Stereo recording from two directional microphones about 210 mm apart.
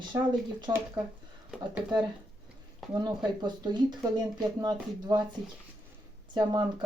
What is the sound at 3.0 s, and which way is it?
Speech, 20° right (ahead or behind).